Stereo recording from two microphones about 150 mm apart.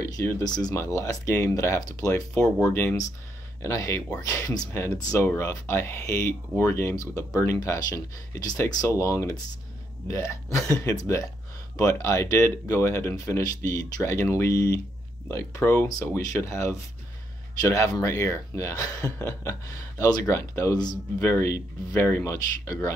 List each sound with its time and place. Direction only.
0.0 s speech: 20° left (ahead or behind)